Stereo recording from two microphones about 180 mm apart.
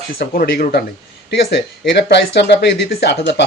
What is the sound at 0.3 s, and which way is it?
Speech, 55° left (ahead or behind).